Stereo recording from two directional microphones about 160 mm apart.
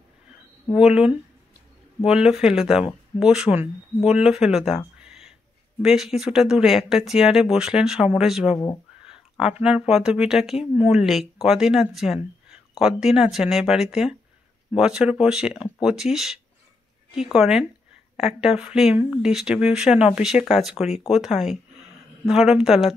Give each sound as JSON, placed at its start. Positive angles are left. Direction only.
{"t": 0.7, "sound": "speech", "side_deg": -5}
{"t": 9.0, "sound": "a sound", "side_deg": -5}
{"t": 9.6, "sound": "speech", "side_deg": -5}